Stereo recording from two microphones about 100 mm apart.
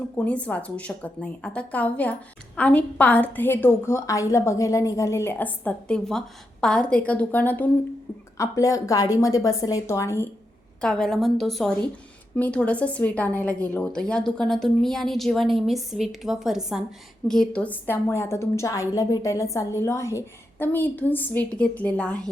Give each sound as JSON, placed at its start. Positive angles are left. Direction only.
{"t": 0.3, "sound": "a woman's voice", "side_deg": 15}
{"t": 8.4, "sound": "a woman's voice", "side_deg": 35}
{"t": 10.8, "sound": "a woman's voice", "side_deg": 5}
{"t": 17.2, "sound": "a woman's voice", "side_deg": 5}